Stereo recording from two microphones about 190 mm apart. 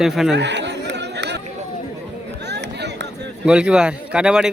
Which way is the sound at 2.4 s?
65° right (ahead or behind).